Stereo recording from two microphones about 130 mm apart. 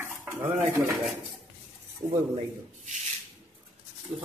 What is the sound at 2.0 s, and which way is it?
Speech, 30° right (ahead or behind).